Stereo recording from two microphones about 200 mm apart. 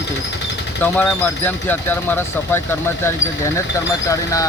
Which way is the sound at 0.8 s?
10° left (ahead or behind).